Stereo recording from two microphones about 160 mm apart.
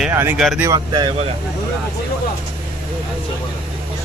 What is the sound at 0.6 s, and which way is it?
Speech, 25° right (ahead or behind).